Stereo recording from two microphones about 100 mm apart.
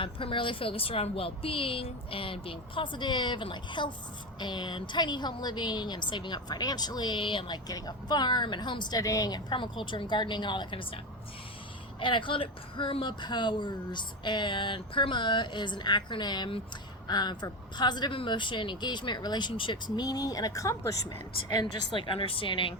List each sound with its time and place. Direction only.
0.0 s a woman's voice: 60° left (ahead or behind)
9.0 s a woman's voice: 35° left (ahead or behind)
9.5 s speech: 55° left (ahead or behind)
20.0 s a woman's voice: 40° left (ahead or behind)
21.5 s a woman's voice: 50° left (ahead or behind)